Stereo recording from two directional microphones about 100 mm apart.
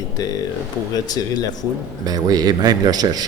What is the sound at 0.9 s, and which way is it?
Speech, 40° left (ahead or behind).